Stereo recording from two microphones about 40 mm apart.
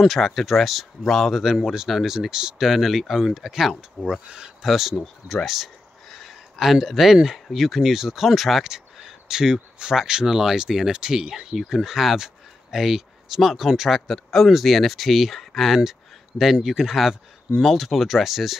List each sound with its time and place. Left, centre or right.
0.0 s speech: centre
1.4 s speech: centre
4.0 s speech: right
4.6 s speech: centre
6.0 s a sound: centre
6.5 s speech: centre
8.6 s a sound: centre
9.4 s speech: centre
15.8 s a sound: centre
16.6 s speech: centre